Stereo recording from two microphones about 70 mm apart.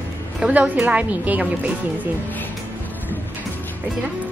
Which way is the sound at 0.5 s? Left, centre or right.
Right.